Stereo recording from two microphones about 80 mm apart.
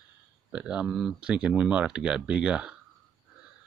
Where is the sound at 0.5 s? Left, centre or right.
Centre.